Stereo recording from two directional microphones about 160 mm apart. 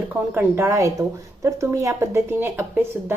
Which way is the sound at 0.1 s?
15° right (ahead or behind).